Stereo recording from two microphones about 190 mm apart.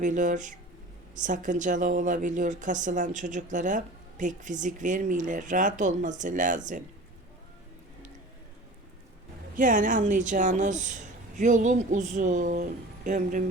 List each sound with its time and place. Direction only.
0.0 s speech: 40° right (ahead or behind)
9.6 s speech: 45° right (ahead or behind)